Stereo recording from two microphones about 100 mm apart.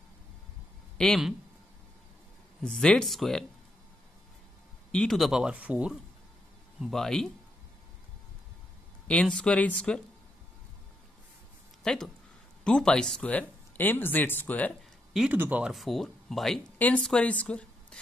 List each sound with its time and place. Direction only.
0.9 s speech: 5° left (ahead or behind)
2.6 s speech: 10° left (ahead or behind)
4.9 s speech: 5° left (ahead or behind); by 5.9 s 15° right (ahead or behind)
6.8 s speech: 5° left (ahead or behind)
9.0 s speech: 10° left (ahead or behind)
11.8 s speech: 5° left (ahead or behind)
15.3 s speech: 20° right (ahead or behind)
15.6 s speech: centre (ahead or behind)
16.7 s a woman's voice: 15° left (ahead or behind)